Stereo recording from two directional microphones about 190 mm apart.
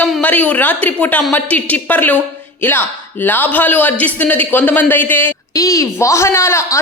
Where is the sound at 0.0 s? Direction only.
10° left (ahead or behind).